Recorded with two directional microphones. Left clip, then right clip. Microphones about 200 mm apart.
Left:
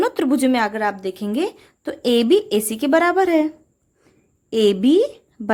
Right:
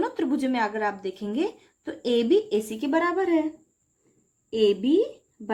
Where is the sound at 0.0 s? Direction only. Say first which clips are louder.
Left 8 dB; 50° left (ahead or behind).